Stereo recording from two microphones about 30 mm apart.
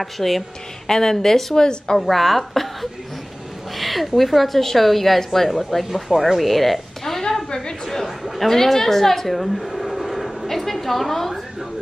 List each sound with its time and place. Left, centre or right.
0.0 s a woman's voice: centre
0.8 s a woman's voice: centre
1.6 s a woman's voice: left
2.0 s a woman's voice: centre
5.9 s a woman's voice: centre
6.4 s a sound: centre
7.8 s chatter: centre
8.2 s a sound: centre